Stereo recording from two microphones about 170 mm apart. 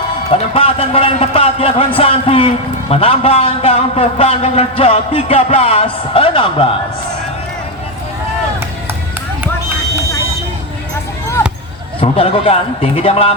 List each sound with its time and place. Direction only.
0.3 s a man's voice: 35° left (ahead or behind)
11.9 s a man's voice: 35° left (ahead or behind)